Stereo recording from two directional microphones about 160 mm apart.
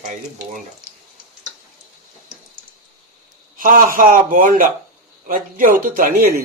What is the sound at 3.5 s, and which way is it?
A man's voice, 55° right (ahead or behind).